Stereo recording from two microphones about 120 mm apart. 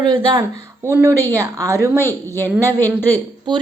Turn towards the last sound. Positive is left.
turn(degrees=-40)  # may be behind; listen again after turning